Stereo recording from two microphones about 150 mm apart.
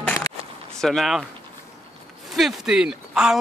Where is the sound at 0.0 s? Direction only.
15° left (ahead or behind).